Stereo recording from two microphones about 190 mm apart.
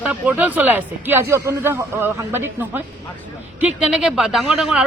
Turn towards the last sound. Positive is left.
turn(degrees=0)  # may be behind; listen again after turning